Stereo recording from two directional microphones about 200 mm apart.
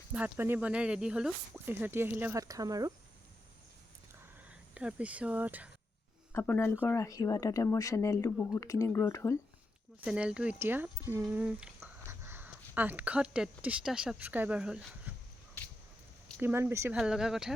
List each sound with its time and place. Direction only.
0.1 s speech: 10° right (ahead or behind)
4.4 s speech: 5° right (ahead or behind)
6.3 s speech: 10° left (ahead or behind)
10.0 s speech: 5° right (ahead or behind)
16.4 s speech: 10° right (ahead or behind)